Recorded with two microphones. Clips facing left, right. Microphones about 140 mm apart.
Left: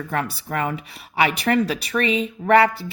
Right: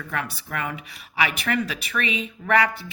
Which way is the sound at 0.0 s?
35° left (ahead or behind).